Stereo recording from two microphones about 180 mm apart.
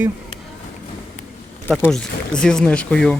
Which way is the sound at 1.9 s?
5° left (ahead or behind).